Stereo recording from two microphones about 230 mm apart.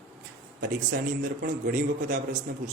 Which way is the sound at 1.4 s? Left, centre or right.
Right.